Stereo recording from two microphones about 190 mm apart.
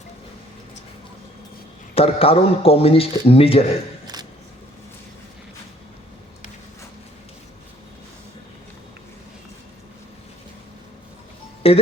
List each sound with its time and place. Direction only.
2.0 s a man's voice: 30° left (ahead or behind)
4.0 s a sound: 20° right (ahead or behind)
11.6 s speech: 30° left (ahead or behind)